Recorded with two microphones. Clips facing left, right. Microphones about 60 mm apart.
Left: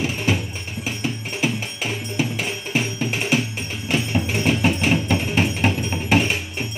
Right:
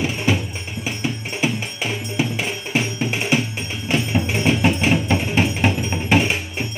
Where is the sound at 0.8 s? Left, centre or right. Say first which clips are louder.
Right 1 dB; centre.